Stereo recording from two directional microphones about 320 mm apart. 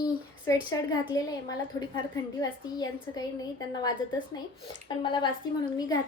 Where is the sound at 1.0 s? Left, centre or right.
Centre.